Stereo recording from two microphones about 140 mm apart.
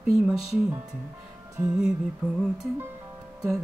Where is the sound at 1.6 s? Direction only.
5° right (ahead or behind).